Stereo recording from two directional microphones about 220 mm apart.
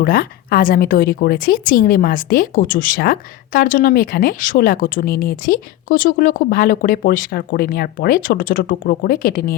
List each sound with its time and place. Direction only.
0.0 s a woman's voice: 45° left (ahead or behind)